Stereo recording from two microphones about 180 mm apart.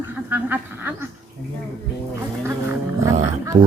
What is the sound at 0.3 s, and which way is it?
Speech, 10° right (ahead or behind).